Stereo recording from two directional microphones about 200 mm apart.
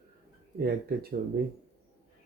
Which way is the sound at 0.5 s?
50° right (ahead or behind).